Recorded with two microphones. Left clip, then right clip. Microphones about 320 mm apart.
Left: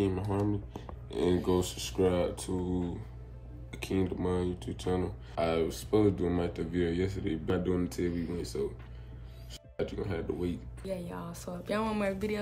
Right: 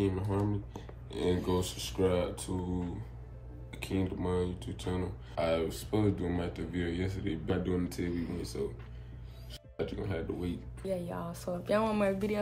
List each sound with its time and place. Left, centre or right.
0.0 s speech: centre
8.1 s speech: centre
9.5 s speech: centre